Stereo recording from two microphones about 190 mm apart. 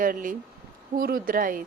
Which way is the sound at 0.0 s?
45° right (ahead or behind).